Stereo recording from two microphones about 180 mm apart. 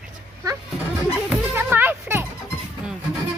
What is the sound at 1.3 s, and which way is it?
Music, 10° right (ahead or behind).